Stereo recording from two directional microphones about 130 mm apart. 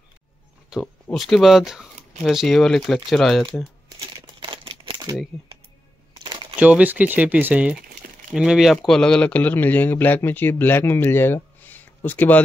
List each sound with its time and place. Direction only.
0.7 s speech: 5° right (ahead or behind)
4.4 s a sound: 40° right (ahead or behind)
6.1 s crumpling: 40° right (ahead or behind)
6.6 s speech: 10° right (ahead or behind); by 12.4 s 15° left (ahead or behind)